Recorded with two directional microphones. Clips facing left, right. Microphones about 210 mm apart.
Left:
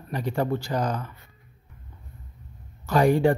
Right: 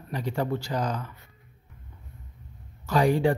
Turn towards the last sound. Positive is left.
turn(degrees=50)  # may be behind; listen again after turning